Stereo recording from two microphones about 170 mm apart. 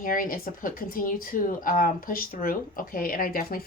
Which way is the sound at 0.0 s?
55° left (ahead or behind).